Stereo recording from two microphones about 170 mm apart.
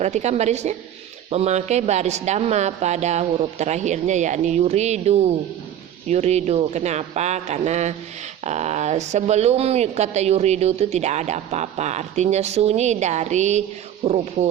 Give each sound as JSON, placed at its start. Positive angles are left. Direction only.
{"t": 0.0, "sound": "speech", "side_deg": -40}